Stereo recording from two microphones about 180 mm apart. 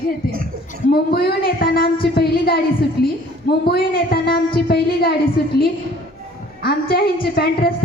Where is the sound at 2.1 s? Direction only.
60° left (ahead or behind).